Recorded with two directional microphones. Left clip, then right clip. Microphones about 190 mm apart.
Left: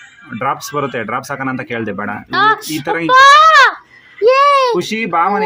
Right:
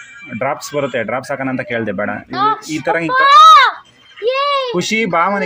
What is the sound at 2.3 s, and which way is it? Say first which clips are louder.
Speech: left 4 dB; 30° left (ahead or behind).